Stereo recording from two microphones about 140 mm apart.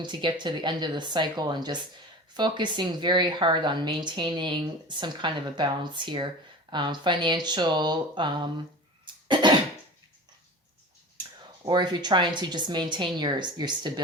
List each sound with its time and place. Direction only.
0.0 s speech: 35° right (ahead or behind)
9.2 s cough: 35° right (ahead or behind)
11.6 s speech: 30° right (ahead or behind)